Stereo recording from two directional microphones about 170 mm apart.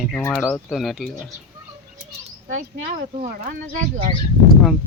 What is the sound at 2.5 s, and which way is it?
Speech, 50° right (ahead or behind).